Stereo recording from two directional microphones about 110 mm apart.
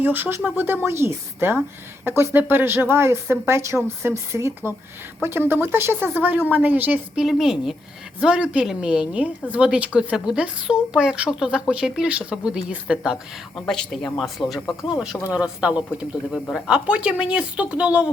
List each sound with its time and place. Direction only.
0.0 s a woman's voice: 20° right (ahead or behind)
7.2 s a woman's voice: 5° right (ahead or behind)
15.3 s a woman's voice: 10° right (ahead or behind)